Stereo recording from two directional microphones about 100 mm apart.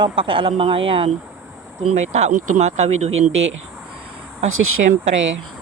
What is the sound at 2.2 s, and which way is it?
Speech, 90° right.